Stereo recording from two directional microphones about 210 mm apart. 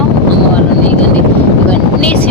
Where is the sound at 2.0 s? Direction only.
5° left (ahead or behind).